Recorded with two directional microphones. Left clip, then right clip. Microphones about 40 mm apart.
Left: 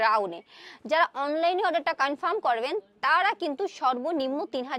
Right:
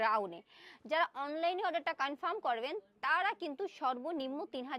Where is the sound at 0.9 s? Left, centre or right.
Left.